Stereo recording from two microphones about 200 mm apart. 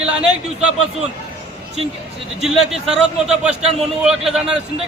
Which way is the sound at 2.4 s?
5° right (ahead or behind).